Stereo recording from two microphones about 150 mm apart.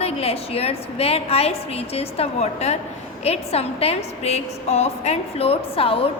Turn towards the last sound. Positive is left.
turn(degrees=40)  # may be behind; listen again after turning